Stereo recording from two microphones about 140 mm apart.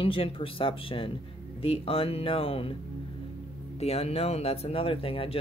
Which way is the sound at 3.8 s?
50° left (ahead or behind).